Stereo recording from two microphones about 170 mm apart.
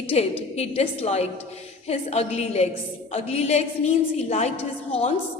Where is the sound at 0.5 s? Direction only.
40° left (ahead or behind).